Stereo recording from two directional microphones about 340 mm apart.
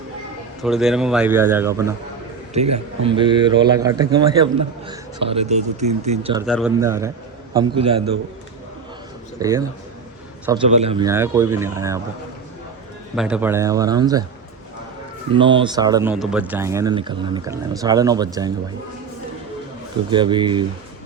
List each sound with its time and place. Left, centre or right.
0.6 s a man's voice: centre
2.6 s a man's voice: right
3.1 s speech: centre
6.4 s a man's voice: centre
9.4 s speech: centre
10.7 s speech: centre
13.1 s speech: centre
15.3 s speech: centre
20.1 s speech: centre